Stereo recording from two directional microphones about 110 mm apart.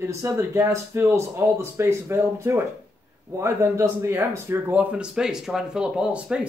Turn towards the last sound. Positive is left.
turn(degrees=-10)  # may be behind; listen again after turning